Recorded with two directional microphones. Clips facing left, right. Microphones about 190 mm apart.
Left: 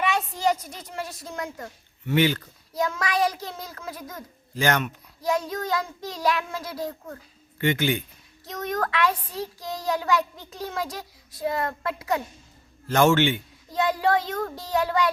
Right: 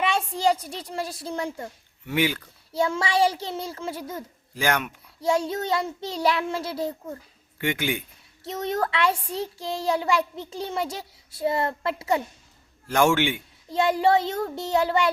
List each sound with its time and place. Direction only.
0.0 s a child's voice: 30° right (ahead or behind)
2.0 s a man's voice: 10° right (ahead or behind)
2.7 s a child's voice: 25° right (ahead or behind)
4.5 s a man's voice: 10° right (ahead or behind)
5.2 s a child's voice: 25° right (ahead or behind)
7.6 s a man's voice: 10° right (ahead or behind)
8.4 s a child's voice: 25° right (ahead or behind)
12.9 s a man's voice: 10° right (ahead or behind)
13.7 s a child's voice: 25° right (ahead or behind)